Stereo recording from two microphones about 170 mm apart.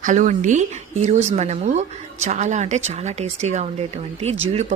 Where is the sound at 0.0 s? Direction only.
50° right (ahead or behind).